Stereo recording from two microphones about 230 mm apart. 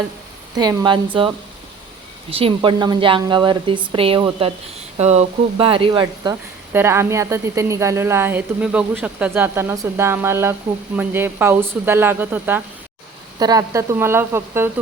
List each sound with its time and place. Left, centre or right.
0.5 s speech: centre
2.3 s a woman's voice: right